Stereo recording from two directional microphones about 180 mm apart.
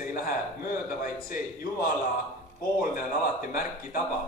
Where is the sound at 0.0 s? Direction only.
50° left (ahead or behind).